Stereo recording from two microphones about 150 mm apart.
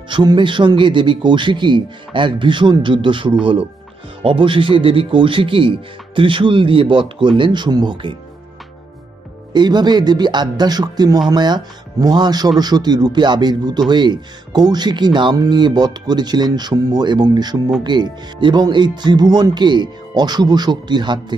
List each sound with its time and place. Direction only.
0.1 s a man's voice: 30° right (ahead or behind)
9.5 s speech: 30° right (ahead or behind)